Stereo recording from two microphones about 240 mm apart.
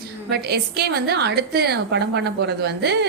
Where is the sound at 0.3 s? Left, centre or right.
Right.